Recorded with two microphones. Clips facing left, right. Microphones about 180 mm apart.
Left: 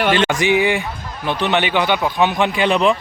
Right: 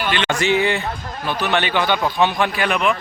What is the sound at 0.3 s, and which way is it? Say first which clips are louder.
Speech: left 2 dB; 15° left (ahead or behind).